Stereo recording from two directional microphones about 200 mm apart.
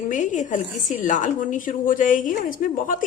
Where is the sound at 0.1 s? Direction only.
40° left (ahead or behind).